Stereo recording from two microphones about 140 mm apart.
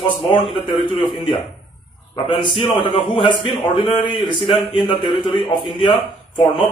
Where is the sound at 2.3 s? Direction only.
40° left (ahead or behind).